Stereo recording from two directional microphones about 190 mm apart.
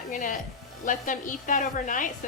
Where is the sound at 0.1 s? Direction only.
45° left (ahead or behind).